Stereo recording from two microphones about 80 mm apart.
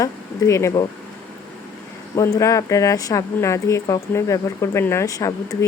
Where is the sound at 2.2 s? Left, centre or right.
Left.